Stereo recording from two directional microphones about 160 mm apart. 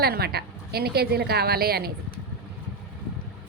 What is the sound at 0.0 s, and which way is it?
A woman's voice, 75° right (ahead or behind).